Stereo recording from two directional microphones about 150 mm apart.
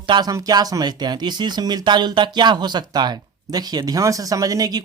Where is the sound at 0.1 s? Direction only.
25° right (ahead or behind).